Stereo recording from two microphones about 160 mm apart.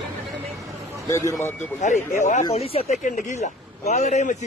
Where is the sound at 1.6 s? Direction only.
50° left (ahead or behind).